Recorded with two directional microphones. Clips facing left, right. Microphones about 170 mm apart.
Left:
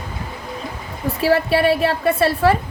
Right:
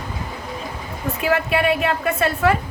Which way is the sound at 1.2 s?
35° left (ahead or behind).